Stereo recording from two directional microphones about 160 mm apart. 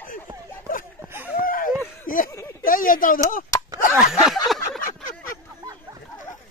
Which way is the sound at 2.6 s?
60° left (ahead or behind).